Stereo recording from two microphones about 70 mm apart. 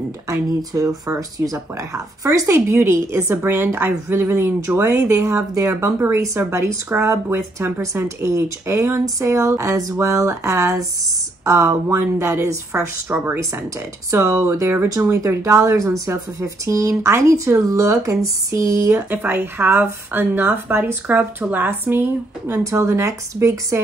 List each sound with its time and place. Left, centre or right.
0.3 s speech: right
2.7 s speech: right
13.1 s speech: right
14.9 s speech: right
19.0 s speech: right
22.6 s speech: right